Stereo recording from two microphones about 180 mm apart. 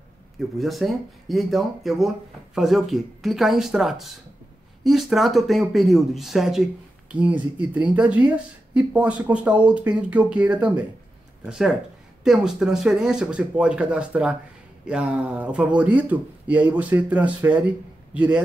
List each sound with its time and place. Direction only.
0.6 s a man's voice: centre (ahead or behind)